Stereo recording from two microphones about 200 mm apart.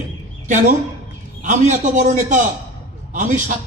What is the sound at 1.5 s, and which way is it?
A man's voice, 35° right (ahead or behind).